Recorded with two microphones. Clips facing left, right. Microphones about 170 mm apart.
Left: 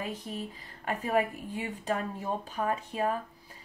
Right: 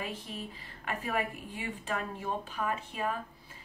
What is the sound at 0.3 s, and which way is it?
Speech, 40° left (ahead or behind).